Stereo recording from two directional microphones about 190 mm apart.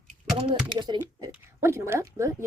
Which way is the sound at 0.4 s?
25° right (ahead or behind).